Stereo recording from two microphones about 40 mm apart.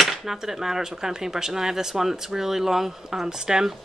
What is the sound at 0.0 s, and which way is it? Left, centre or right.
Speech, centre.